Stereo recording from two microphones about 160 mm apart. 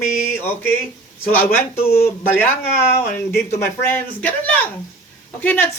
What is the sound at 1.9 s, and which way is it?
Speech, 40° left (ahead or behind).